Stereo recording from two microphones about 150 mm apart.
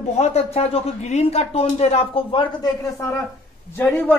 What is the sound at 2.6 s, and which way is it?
A man's voice, 20° left (ahead or behind).